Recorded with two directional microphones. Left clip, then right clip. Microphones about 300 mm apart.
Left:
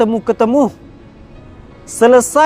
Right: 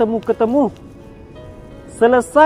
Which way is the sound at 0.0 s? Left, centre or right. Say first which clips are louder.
Left 3 dB; left.